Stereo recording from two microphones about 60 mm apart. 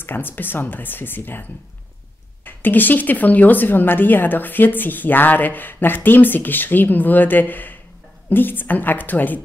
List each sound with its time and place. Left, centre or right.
0.0 s speech: left